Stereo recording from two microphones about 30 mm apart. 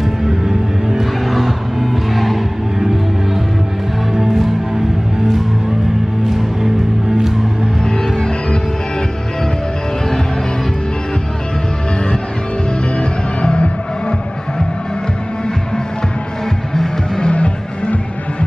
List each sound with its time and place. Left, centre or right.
0.5 s music: centre
1.2 s vehicle: centre
4.2 s music: centre
6.2 s music: centre
7.8 s music: centre
13.0 s music: left
16.7 s music: centre
17.2 s music: left